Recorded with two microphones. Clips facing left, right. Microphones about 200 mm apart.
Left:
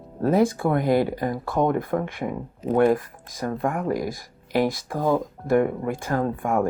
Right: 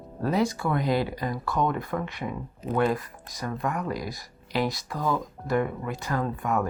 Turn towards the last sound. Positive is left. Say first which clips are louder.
# left 4 dB
turn(degrees=50)  # may be behind; listen again after turning